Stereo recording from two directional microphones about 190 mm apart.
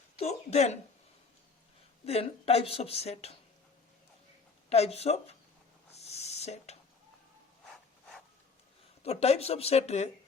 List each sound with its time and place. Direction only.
0.2 s speech: 35° left (ahead or behind)
2.0 s speech: 30° left (ahead or behind)
4.7 s speech: 35° left (ahead or behind)
5.9 s a sound: 35° left (ahead or behind)
9.0 s speech: 35° left (ahead or behind)